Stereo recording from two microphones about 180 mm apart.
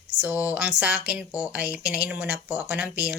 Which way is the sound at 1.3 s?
15° left (ahead or behind).